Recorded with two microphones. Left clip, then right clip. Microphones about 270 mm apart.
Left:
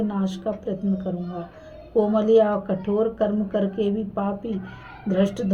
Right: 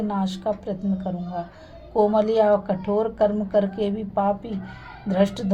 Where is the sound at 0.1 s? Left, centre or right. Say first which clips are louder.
Right 2 dB; right.